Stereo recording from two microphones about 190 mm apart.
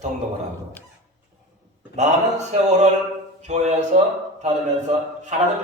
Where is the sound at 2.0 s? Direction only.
35° right (ahead or behind).